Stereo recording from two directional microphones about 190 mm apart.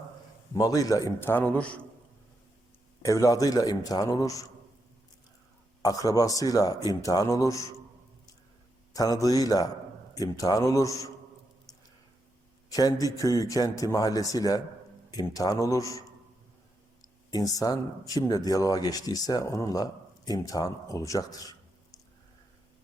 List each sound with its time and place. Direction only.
0.5 s a man's voice: 20° left (ahead or behind)
3.0 s speech: 15° left (ahead or behind)
5.8 s speech: 20° left (ahead or behind)
8.9 s a man's voice: 20° left (ahead or behind)
12.6 s a man's voice: 20° left (ahead or behind)